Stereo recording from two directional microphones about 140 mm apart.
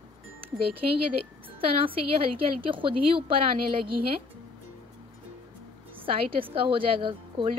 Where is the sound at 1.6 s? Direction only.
40° right (ahead or behind).